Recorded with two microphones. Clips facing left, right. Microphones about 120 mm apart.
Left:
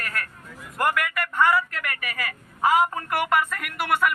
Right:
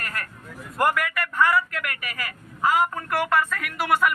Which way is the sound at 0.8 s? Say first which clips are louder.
Right 2 dB; 5° right (ahead or behind).